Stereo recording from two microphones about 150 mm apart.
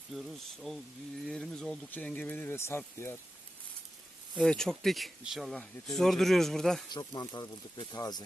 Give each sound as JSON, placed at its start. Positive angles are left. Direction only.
{"t": 0.1, "sound": "speech", "side_deg": 0}
{"t": 4.4, "sound": "speech", "side_deg": 5}
{"t": 6.9, "sound": "speech", "side_deg": 30}